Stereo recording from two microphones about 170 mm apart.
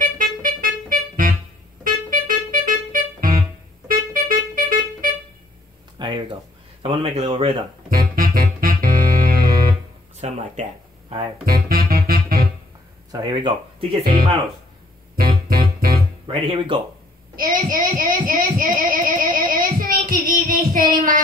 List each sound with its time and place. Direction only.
0.0 s music: 55° right (ahead or behind)
5.9 s a sound: 25° right (ahead or behind)
6.8 s speech: 35° right (ahead or behind)
7.9 s music: 55° right (ahead or behind)
10.2 s speech: 40° right (ahead or behind)
11.5 s music: 60° right (ahead or behind)
13.1 s speech: 25° right (ahead or behind)
15.4 s keyboard: 60° right (ahead or behind)
16.3 s speech: 30° right (ahead or behind)
17.4 s a woman's voice: 55° right (ahead or behind)